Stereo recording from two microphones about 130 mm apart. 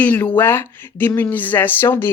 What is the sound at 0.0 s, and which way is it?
A woman's voice, 15° left (ahead or behind).